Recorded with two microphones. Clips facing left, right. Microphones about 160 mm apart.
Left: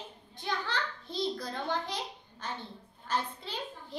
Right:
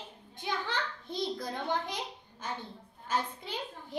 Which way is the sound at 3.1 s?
15° right (ahead or behind).